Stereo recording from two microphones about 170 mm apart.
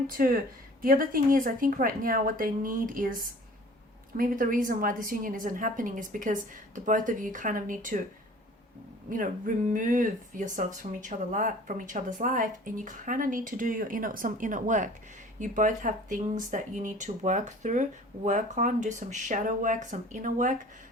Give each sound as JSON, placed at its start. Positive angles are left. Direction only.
{"t": 0.1, "sound": "speech", "side_deg": -55}
{"t": 9.0, "sound": "speech", "side_deg": -55}